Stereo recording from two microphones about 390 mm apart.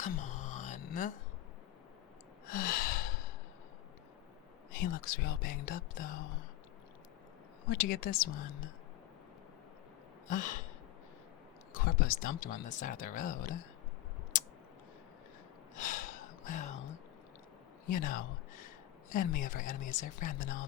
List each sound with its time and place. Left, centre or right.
0.0 s a sound: centre
2.5 s gasp: left
4.7 s speech: left
7.7 s speech: left
10.2 s speech: centre
11.7 s speech: left
14.3 s a sound: left
15.7 s a sound: centre
17.8 s speech: left